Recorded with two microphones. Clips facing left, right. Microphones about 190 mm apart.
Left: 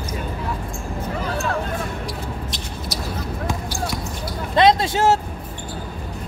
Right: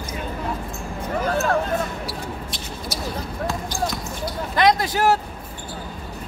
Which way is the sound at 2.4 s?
Centre (ahead or behind).